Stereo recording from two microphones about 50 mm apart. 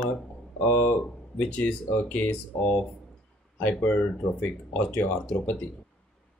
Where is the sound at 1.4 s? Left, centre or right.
Left.